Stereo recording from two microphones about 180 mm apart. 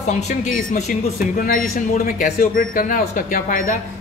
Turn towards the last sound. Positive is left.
turn(degrees=50)  # may be behind; listen again after turning